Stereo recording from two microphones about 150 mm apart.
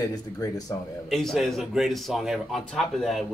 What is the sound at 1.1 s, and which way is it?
A man's voice, centre (ahead or behind).